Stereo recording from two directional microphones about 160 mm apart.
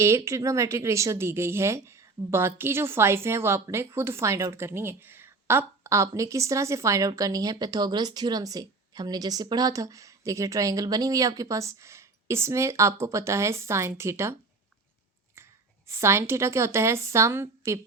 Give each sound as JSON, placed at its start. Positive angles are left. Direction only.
{"t": 0.0, "sound": "speech", "side_deg": -15}
{"t": 15.4, "sound": "a sound", "side_deg": -15}
{"t": 15.9, "sound": "a woman's voice", "side_deg": -15}